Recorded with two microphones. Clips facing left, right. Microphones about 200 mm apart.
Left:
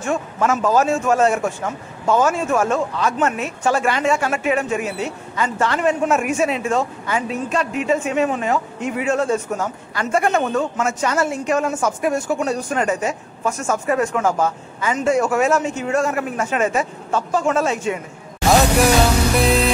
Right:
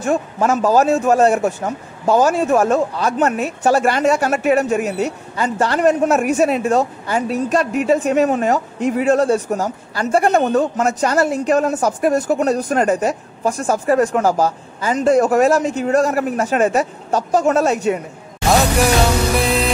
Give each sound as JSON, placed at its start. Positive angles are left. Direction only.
{"t": 0.0, "sound": "speech", "side_deg": -35}
{"t": 19.3, "sound": "music", "side_deg": 0}